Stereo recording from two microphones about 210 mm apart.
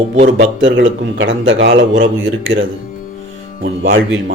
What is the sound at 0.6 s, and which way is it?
A man's voice, 60° right (ahead or behind).